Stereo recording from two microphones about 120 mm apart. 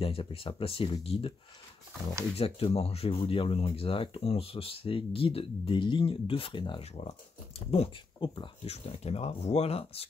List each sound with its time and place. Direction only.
0.0 s speech: 50° left (ahead or behind)
2.3 s speech: 55° left (ahead or behind)
6.8 s speech: 60° left (ahead or behind)
8.2 s speech: 40° left (ahead or behind)
8.6 s speech: 55° left (ahead or behind)